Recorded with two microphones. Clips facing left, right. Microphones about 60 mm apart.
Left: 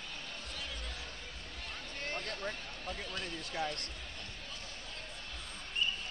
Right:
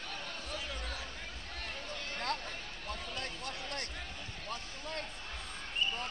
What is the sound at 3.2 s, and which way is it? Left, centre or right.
Basketball bounce, right.